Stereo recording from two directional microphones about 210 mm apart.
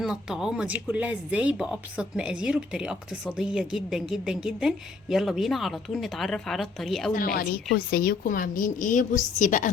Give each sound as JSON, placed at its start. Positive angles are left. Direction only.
{"t": 0.0, "sound": "speech", "side_deg": -5}
{"t": 7.3, "sound": "a woman's voice", "side_deg": 45}